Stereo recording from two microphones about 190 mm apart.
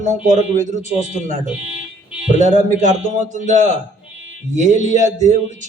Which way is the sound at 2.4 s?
40° right (ahead or behind).